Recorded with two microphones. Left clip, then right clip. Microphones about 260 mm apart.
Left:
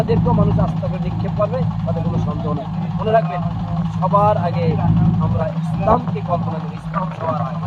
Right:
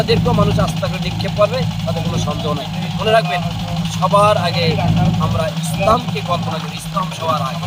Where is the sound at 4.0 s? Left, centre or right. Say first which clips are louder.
Right 3 dB; centre.